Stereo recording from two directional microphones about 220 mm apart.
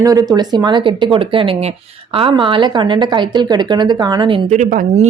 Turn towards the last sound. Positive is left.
turn(degrees=-35)  # may be behind; listen again after turning